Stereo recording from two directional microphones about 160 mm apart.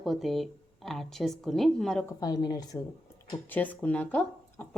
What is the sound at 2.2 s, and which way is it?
Speech, 25° left (ahead or behind).